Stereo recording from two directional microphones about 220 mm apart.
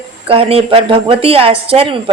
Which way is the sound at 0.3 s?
25° right (ahead or behind).